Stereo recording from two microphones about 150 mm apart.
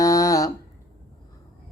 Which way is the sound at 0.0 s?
20° left (ahead or behind).